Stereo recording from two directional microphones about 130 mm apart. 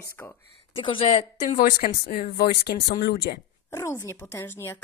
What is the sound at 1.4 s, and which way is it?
Speech, 90° left.